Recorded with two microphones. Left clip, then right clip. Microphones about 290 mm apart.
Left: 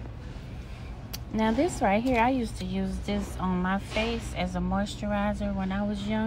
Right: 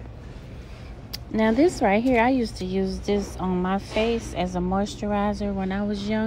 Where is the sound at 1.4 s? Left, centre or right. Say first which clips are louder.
Right 5 dB; centre.